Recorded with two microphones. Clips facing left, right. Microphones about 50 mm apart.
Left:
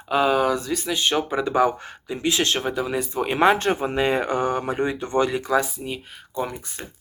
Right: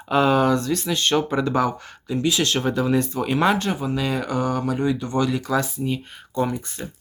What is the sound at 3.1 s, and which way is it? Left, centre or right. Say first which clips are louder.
Speech: left 1 dB; left.